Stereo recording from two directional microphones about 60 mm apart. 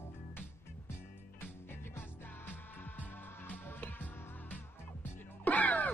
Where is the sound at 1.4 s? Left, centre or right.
Left.